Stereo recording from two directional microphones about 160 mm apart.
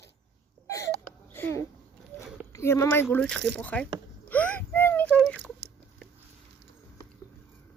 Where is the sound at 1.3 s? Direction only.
15° left (ahead or behind).